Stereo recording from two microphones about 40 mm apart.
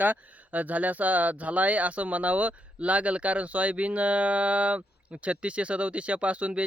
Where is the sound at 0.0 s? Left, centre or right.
Right.